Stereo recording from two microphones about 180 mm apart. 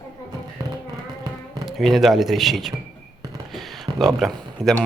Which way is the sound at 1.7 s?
Centre (ahead or behind).